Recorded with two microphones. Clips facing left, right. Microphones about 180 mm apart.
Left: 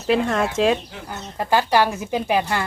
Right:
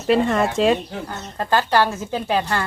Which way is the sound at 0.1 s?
Centre (ahead or behind).